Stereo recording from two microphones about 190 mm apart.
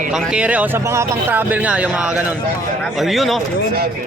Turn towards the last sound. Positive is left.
turn(degrees=0)  # may be behind; listen again after turning